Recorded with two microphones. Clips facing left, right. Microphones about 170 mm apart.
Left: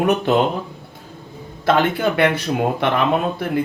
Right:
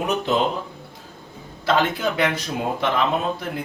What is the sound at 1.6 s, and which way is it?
Speech, 55° left (ahead or behind).